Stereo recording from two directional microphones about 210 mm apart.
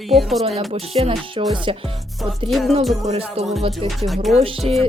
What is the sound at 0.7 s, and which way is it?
Speech, 30° right (ahead or behind).